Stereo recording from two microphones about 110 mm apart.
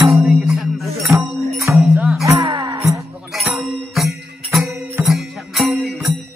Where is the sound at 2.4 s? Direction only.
45° right (ahead or behind).